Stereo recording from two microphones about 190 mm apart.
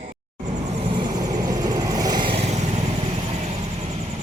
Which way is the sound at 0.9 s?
20° right (ahead or behind).